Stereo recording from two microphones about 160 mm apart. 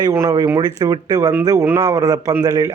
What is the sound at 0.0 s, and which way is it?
A man's voice, 20° right (ahead or behind).